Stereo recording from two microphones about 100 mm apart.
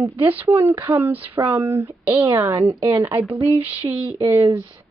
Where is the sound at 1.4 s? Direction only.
30° right (ahead or behind).